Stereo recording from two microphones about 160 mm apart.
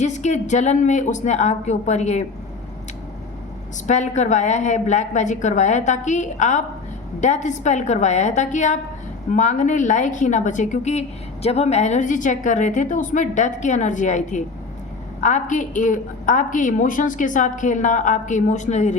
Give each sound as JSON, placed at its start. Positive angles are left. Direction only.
{"t": 0.0, "sound": "a woman's voice", "side_deg": 45}
{"t": 3.8, "sound": "a woman's voice", "side_deg": 50}